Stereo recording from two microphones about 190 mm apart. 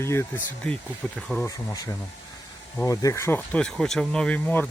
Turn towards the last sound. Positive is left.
turn(degrees=5)  # may be behind; listen again after turning